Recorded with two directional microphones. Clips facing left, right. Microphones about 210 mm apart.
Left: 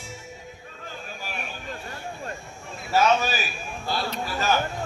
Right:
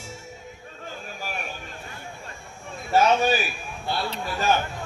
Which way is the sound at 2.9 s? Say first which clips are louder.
Right 2 dB; 55° right (ahead or behind).